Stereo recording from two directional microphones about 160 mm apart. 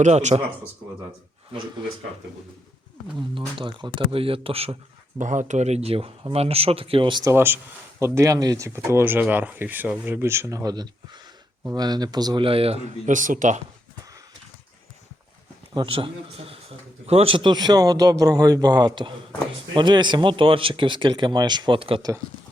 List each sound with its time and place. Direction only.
0.0 s speech: 45° right (ahead or behind)
3.2 s speech: 30° right (ahead or behind)
5.2 s speech: 50° right (ahead or behind); by 7.3 s 30° right (ahead or behind)
7.3 s a man's voice: 15° right (ahead or behind); by 13.6 s 55° right (ahead or behind)
15.7 s a man's voice: 30° right (ahead or behind)